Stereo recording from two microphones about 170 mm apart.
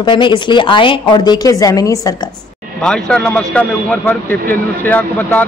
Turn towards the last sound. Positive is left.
turn(degrees=10)  # may be behind; listen again after turning